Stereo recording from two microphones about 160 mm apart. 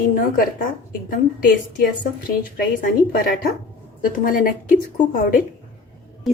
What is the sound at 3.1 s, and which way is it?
A woman's voice, 70° left (ahead or behind).